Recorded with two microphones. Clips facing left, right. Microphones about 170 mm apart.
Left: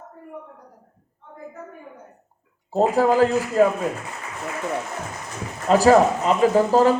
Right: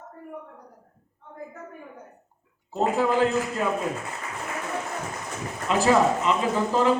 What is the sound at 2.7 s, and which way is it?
Speech, 40° left (ahead or behind).